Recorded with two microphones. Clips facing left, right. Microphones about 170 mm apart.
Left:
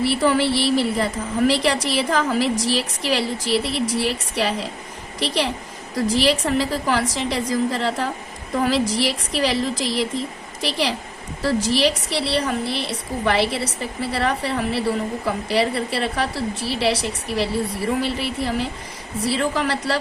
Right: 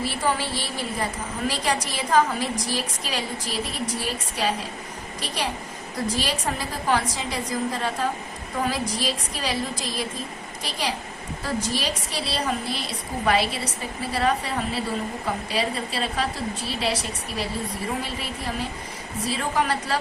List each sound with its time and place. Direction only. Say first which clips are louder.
0.0 s a woman's voice: left 7 dB; 75° left (ahead or behind)